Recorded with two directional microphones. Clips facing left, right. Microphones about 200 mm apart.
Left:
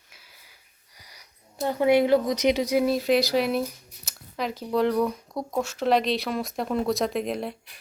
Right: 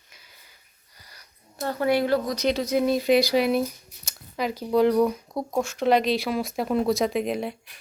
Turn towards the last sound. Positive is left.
turn(degrees=0)  # may be behind; listen again after turning